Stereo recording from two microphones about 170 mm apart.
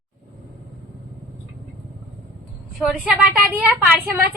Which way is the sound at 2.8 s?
5° right (ahead or behind).